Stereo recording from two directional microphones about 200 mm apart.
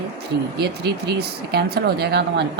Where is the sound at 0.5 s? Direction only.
55° right (ahead or behind).